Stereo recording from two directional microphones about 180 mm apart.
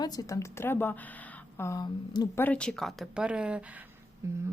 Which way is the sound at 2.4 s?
10° left (ahead or behind).